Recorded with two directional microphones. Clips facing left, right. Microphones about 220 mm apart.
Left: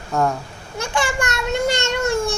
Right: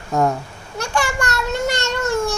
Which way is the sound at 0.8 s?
20° left (ahead or behind).